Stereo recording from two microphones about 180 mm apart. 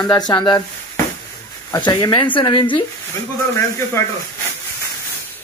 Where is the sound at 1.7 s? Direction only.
20° left (ahead or behind).